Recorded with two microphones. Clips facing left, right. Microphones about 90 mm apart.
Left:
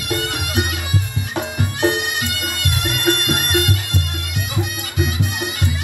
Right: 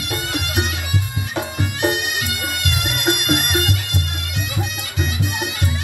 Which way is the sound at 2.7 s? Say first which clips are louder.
Left 3 dB; 15° right (ahead or behind).